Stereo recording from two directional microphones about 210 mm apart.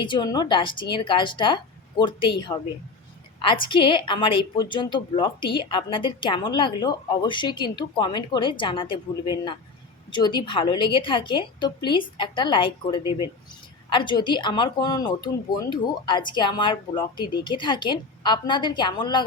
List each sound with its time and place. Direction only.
0.0 s a woman's voice: 20° left (ahead or behind)